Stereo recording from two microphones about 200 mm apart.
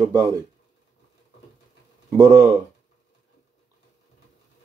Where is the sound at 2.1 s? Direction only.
15° right (ahead or behind).